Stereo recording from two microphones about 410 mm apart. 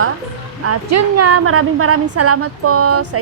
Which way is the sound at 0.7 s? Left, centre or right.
Right.